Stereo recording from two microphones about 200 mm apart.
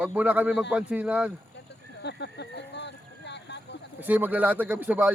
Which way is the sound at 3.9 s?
10° right (ahead or behind).